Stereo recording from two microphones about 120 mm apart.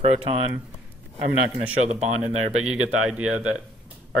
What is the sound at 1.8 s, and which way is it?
Speech, 65° right (ahead or behind).